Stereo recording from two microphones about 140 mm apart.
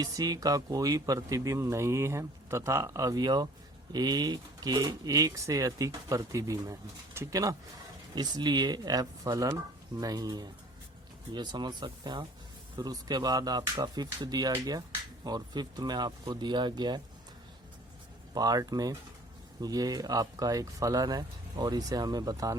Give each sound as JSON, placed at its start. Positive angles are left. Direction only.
{"t": 0.0, "sound": "speech", "side_deg": -25}
{"t": 18.3, "sound": "speech", "side_deg": -25}